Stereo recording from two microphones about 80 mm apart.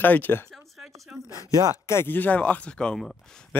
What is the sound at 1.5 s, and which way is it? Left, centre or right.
Speech, right.